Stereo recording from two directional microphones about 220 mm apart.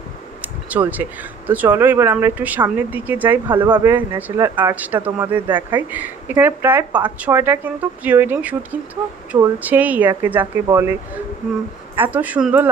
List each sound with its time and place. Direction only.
0.4 s a sound: 5° right (ahead or behind)
1.5 s speech: 10° right (ahead or behind)
3.6 s speech: 20° right (ahead or behind)
3.9 s speech: 10° right (ahead or behind)